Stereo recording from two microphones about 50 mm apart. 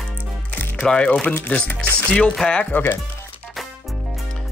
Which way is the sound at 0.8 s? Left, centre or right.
Centre.